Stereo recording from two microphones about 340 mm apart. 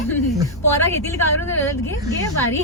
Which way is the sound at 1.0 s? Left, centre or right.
Centre.